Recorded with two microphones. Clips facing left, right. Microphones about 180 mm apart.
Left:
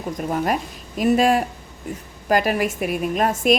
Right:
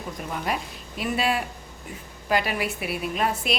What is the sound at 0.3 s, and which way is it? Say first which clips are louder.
A woman's voice: left 7 dB; 45° left (ahead or behind).